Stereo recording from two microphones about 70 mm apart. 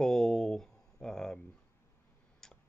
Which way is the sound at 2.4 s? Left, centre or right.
Centre.